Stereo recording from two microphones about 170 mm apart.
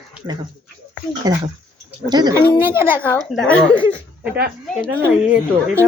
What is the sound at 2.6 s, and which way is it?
Speech, 15° right (ahead or behind).